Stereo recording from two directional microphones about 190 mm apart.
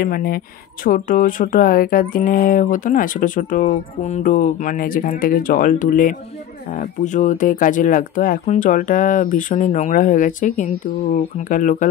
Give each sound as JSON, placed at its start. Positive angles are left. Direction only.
{"t": 0.0, "sound": "speech", "side_deg": 50}